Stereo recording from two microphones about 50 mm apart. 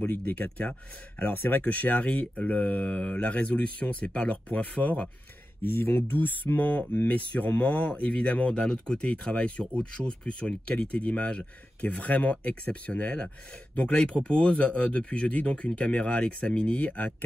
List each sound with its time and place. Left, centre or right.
0.0 s speech: left
1.3 s speech: left
1.6 s speech: left
5.6 s speech: left